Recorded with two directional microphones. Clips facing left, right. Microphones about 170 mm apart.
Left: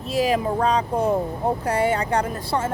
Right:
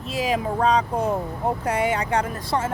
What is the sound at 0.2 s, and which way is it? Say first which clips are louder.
A woman's voice: left 2 dB; 35° left (ahead or behind).